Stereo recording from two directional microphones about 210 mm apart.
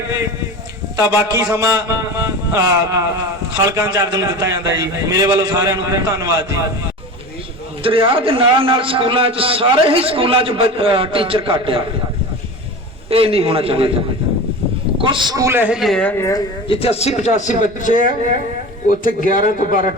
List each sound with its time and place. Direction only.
1.3 s a man's voice: 15° right (ahead or behind)
7.8 s a man's voice: 25° right (ahead or behind)
13.1 s a man's voice: 25° right (ahead or behind)
15.0 s a man's voice: 20° right (ahead or behind); by 16.4 s 10° left (ahead or behind)
16.6 s speech: 30° left (ahead or behind)